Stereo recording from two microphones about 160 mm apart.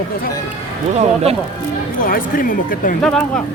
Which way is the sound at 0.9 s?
40° right (ahead or behind).